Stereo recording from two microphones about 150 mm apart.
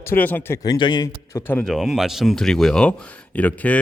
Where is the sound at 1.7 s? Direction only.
Centre (ahead or behind).